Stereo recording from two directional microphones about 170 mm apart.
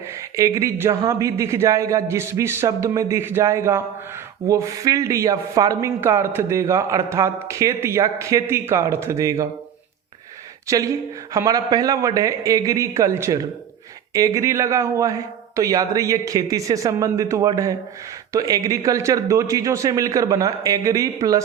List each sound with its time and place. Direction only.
0.3 s a man's voice: 20° right (ahead or behind)
10.7 s a man's voice: 20° right (ahead or behind)